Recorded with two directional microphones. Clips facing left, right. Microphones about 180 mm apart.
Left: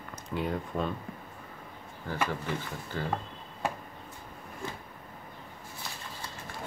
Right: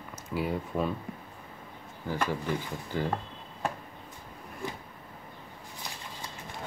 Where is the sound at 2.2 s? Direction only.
15° right (ahead or behind).